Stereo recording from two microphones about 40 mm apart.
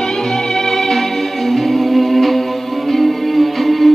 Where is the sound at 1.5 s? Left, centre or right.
Centre.